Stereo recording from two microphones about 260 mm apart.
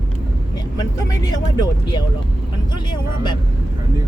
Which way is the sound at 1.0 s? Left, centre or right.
Centre.